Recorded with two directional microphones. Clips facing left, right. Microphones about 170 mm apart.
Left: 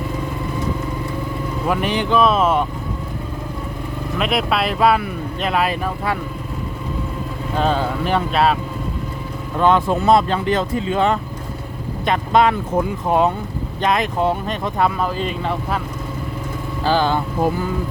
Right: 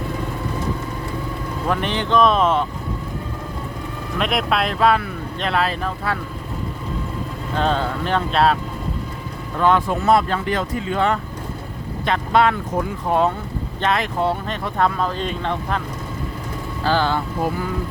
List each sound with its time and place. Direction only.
1.6 s speech: 10° left (ahead or behind)
4.2 s speech: centre (ahead or behind)
7.5 s speech: 10° left (ahead or behind)
9.6 s speech: 20° left (ahead or behind); by 15.8 s 5° left (ahead or behind)
16.8 s speech: 15° left (ahead or behind)